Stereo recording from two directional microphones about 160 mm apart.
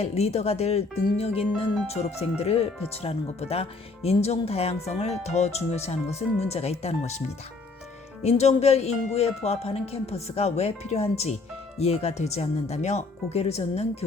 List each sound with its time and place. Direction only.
0.0 s speech: 40° left (ahead or behind)
8.2 s speech: 45° left (ahead or behind)